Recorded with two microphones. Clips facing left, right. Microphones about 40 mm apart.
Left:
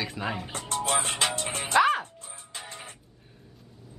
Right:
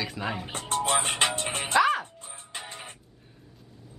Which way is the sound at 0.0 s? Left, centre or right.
Centre.